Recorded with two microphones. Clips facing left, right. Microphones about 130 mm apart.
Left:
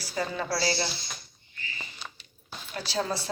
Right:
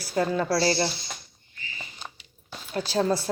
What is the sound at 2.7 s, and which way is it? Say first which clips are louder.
Speech: right 6 dB; 45° right (ahead or behind).